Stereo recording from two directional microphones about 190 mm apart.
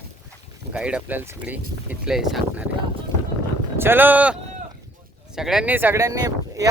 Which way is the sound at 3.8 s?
10° right (ahead or behind).